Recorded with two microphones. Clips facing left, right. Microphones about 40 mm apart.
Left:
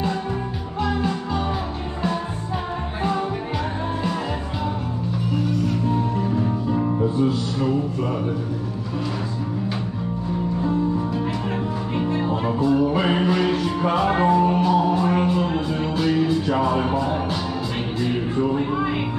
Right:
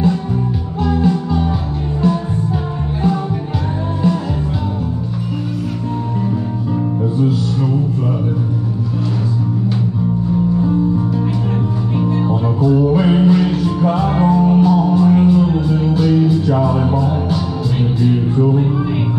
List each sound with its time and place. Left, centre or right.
0.8 s music: centre
5.6 s music: centre
12.0 s music: centre
12.3 s music: centre
12.7 s music: centre